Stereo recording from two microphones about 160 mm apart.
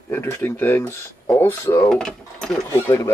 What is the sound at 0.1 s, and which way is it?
Speech, 15° left (ahead or behind).